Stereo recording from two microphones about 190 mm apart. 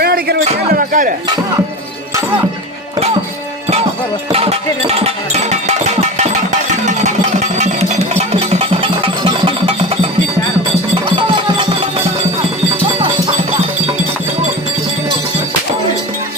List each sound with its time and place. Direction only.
0.0 s a sound: 55° right (ahead or behind)
4.3 s music: 35° right (ahead or behind)
11.1 s music: 25° right (ahead or behind)